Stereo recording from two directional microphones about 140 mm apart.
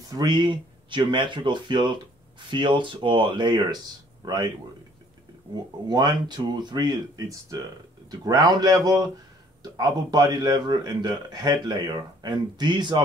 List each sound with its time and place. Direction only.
0.1 s speech: 30° right (ahead or behind)
5.5 s a man's voice: 30° right (ahead or behind)